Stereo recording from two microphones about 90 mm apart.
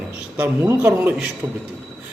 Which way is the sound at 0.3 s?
25° right (ahead or behind).